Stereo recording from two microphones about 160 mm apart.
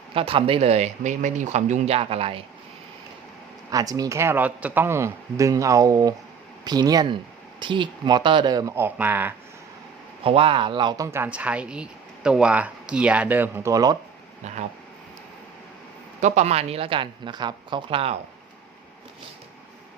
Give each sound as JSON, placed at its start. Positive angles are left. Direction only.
{"t": 0.1, "sound": "speech", "side_deg": -35}
{"t": 3.7, "sound": "speech", "side_deg": -20}
{"t": 10.2, "sound": "speech", "side_deg": -35}
{"t": 14.4, "sound": "speech", "side_deg": -45}
{"t": 16.2, "sound": "speech", "side_deg": -45}